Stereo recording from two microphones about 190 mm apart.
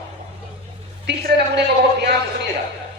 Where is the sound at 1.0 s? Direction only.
60° right (ahead or behind).